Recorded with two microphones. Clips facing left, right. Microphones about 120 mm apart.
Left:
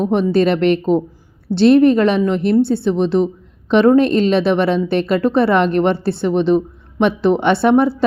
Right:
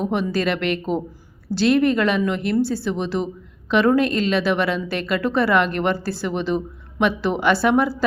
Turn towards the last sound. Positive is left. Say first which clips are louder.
# left 5 dB
turn(degrees=25)  # may be behind; listen again after turning